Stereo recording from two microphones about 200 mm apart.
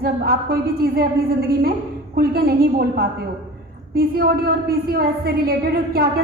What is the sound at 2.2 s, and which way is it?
A woman's voice, 50° right (ahead or behind).